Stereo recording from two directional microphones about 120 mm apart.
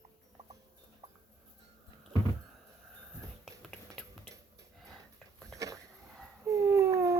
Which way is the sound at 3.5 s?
Centre (ahead or behind).